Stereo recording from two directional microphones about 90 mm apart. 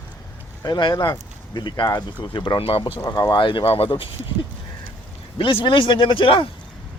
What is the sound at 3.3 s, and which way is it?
Speech, 60° left (ahead or behind).